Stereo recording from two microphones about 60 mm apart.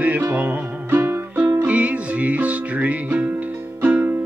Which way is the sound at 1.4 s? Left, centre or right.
Right.